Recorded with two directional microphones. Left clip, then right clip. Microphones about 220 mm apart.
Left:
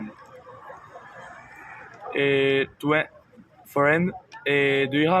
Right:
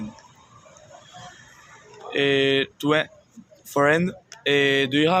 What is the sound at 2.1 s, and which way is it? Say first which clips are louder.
Speech: right 1 dB; 25° right (ahead or behind).